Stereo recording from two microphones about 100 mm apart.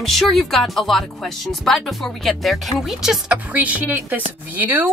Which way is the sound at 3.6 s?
15° right (ahead or behind).